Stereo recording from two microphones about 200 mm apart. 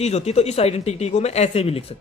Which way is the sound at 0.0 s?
30° left (ahead or behind).